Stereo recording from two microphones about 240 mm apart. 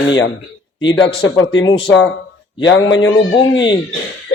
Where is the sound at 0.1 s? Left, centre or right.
Left.